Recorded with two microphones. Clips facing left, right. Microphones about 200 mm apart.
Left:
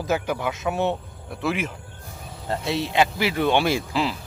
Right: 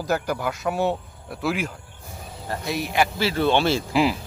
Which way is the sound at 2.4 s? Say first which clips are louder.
Left 2 dB; 25° left (ahead or behind).